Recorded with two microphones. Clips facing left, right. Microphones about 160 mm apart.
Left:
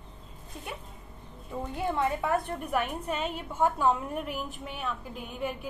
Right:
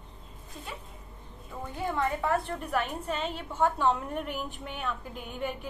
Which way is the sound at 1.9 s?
15° left (ahead or behind).